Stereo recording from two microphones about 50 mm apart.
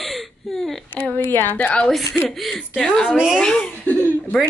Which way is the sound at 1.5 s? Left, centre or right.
Left.